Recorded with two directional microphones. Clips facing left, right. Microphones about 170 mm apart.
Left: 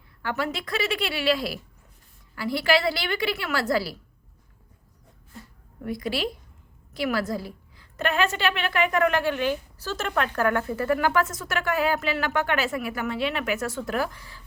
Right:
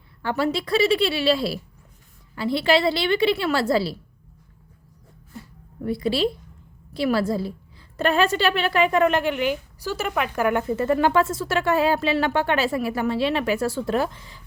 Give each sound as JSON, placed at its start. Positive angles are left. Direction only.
{"t": 0.2, "sound": "a woman's voice", "side_deg": -30}
{"t": 5.8, "sound": "a woman's voice", "side_deg": -30}